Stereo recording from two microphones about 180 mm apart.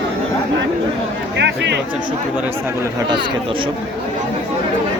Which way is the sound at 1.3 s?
75° right (ahead or behind).